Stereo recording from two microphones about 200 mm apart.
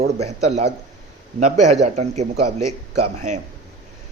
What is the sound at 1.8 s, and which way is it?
Speech, 35° right (ahead or behind).